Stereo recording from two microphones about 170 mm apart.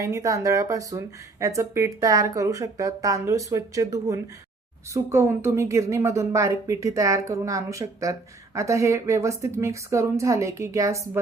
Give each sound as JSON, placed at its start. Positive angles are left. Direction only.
{"t": 0.0, "sound": "a woman's voice", "side_deg": -20}